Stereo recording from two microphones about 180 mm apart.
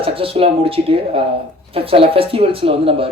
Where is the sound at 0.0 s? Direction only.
30° right (ahead or behind).